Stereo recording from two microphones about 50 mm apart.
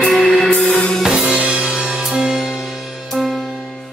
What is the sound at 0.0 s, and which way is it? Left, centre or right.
Music, centre.